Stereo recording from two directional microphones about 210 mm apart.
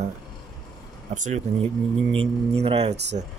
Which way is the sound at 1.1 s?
35° right (ahead or behind).